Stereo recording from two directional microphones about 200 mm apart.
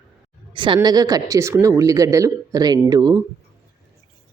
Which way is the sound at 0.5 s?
25° right (ahead or behind).